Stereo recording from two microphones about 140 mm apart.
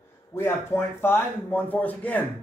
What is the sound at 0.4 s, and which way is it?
A man's voice, 20° left (ahead or behind).